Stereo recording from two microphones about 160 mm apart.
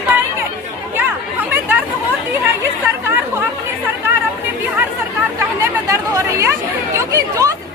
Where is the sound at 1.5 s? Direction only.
15° right (ahead or behind).